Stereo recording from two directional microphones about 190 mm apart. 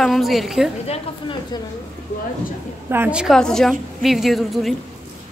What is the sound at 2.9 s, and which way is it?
A woman's voice, 10° right (ahead or behind).